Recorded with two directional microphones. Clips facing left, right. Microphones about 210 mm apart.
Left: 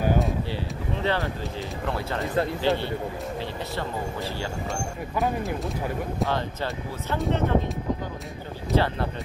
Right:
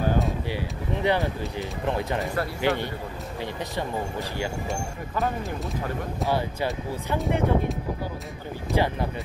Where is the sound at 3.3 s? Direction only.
15° right (ahead or behind).